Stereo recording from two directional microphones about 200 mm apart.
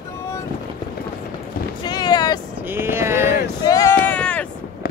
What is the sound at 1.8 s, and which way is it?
Boat, 20° left (ahead or behind).